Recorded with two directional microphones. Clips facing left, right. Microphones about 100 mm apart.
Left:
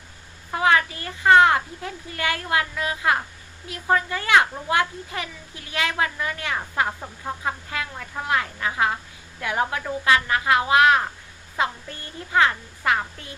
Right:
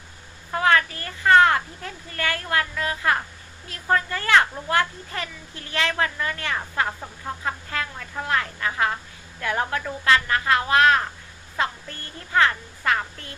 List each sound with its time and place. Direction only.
0.5 s a woman's voice: 15° left (ahead or behind)